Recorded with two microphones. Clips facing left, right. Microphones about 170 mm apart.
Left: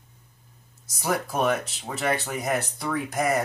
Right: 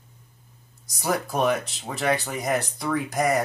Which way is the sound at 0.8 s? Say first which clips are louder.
Right 1 dB; centre (ahead or behind).